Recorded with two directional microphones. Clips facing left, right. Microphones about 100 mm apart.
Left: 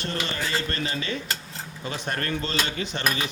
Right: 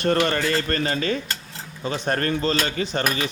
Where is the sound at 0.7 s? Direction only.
45° right (ahead or behind).